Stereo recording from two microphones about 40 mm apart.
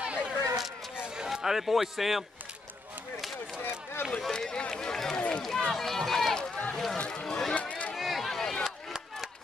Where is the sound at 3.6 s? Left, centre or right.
Left.